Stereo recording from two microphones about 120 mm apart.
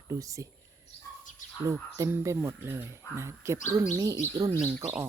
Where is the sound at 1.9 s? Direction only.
25° right (ahead or behind).